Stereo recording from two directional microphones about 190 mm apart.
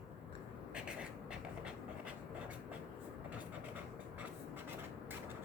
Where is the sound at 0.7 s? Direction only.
5° right (ahead or behind).